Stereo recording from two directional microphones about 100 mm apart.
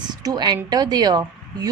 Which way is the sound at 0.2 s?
45° right (ahead or behind).